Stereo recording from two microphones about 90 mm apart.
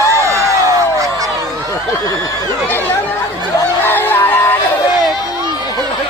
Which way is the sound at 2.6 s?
20° left (ahead or behind).